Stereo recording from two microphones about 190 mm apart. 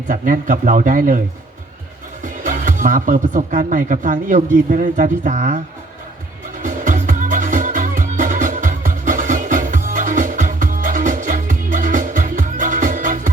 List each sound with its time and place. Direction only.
0.1 s speech: 45° right (ahead or behind)
2.2 s speech: 45° right (ahead or behind)
6.6 s music: 45° right (ahead or behind)